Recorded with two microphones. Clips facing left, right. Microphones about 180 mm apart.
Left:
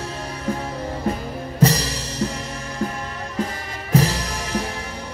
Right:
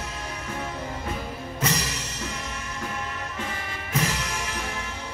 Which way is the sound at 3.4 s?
35° left (ahead or behind).